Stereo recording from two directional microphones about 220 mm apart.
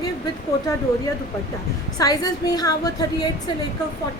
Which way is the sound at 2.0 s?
15° left (ahead or behind).